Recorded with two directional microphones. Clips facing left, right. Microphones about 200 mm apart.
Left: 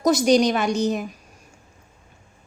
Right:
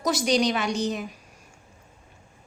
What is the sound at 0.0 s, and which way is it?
A woman's voice, 45° left (ahead or behind).